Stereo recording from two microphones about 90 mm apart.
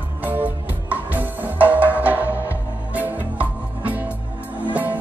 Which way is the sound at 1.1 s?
20° right (ahead or behind).